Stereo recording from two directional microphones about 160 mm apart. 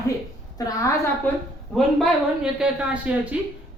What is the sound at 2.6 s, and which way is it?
Speech, 5° right (ahead or behind).